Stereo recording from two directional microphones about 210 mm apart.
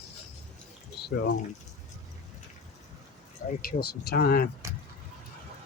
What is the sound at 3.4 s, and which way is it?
Speech, 45° left (ahead or behind).